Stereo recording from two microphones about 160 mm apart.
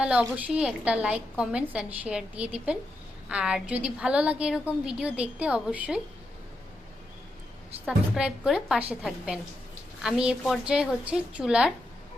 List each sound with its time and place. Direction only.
0.0 s a woman's voice: 5° right (ahead or behind)
7.9 s a woman's voice: 5° right (ahead or behind)